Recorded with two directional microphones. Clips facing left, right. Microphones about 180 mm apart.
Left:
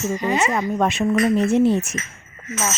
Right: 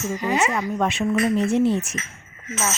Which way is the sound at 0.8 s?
40° left (ahead or behind).